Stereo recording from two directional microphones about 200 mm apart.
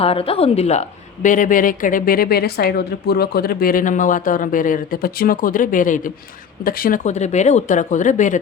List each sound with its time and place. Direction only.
0.0 s a woman's voice: 30° left (ahead or behind)